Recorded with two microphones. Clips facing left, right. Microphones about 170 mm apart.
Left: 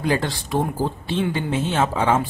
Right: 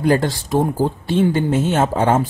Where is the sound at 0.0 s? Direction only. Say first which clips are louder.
Right 6 dB; 45° right (ahead or behind).